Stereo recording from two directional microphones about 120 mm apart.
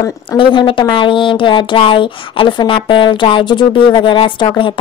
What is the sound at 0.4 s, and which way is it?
Speech, 45° left (ahead or behind).